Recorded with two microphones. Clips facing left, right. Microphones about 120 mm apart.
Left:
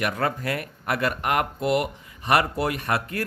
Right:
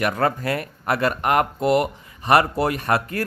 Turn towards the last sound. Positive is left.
turn(degrees=-40)  # may be behind; listen again after turning